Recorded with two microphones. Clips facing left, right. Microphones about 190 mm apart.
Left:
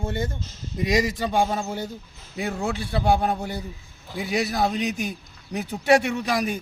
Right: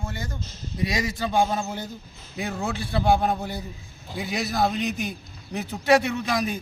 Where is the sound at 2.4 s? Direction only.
10° left (ahead or behind).